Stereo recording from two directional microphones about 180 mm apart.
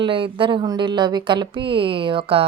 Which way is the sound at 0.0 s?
30° right (ahead or behind).